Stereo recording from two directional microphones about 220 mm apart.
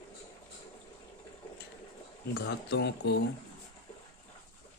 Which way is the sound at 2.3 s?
50° left (ahead or behind).